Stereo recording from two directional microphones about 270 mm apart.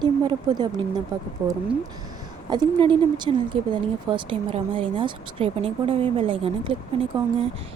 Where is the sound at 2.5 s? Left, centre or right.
Centre.